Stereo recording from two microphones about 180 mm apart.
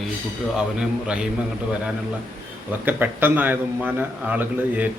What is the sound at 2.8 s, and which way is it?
A man's voice, 10° right (ahead or behind).